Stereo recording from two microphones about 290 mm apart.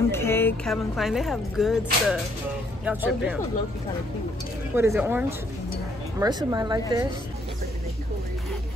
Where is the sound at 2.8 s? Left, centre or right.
Centre.